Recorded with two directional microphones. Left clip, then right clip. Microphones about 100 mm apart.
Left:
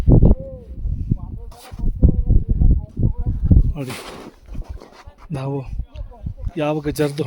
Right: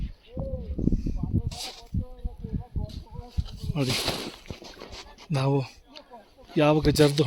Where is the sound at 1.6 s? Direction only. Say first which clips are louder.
Right 3 dB; 15° left (ahead or behind).